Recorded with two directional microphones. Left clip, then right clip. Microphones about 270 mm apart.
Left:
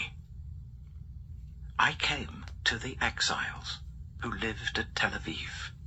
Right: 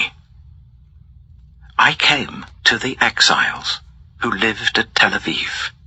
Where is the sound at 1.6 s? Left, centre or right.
Right.